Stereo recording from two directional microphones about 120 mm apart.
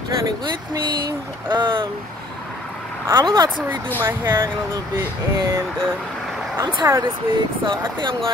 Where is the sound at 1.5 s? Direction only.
40° right (ahead or behind).